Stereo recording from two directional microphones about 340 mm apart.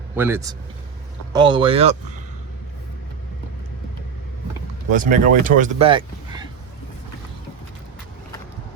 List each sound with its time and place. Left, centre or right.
0.2 s speech: centre
4.9 s speech: right